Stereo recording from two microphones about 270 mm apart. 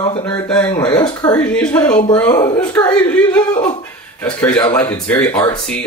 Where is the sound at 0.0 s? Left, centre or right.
Centre.